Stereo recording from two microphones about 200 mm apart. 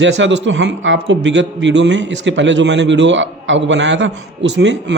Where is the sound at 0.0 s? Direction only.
65° right (ahead or behind).